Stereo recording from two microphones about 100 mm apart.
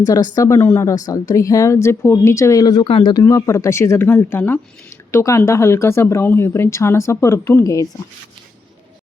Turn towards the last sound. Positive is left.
turn(degrees=30)  # may be behind; listen again after turning